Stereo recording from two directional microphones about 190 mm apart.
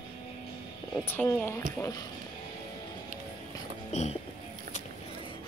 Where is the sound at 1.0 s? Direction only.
10° left (ahead or behind).